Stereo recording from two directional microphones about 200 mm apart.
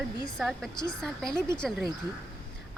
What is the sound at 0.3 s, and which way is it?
Speech, centre (ahead or behind).